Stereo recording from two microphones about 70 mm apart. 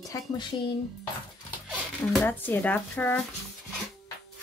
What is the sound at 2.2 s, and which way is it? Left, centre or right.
Speech, left.